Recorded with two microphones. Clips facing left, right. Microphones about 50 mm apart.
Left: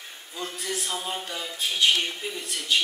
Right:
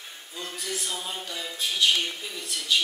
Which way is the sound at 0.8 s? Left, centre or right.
Left.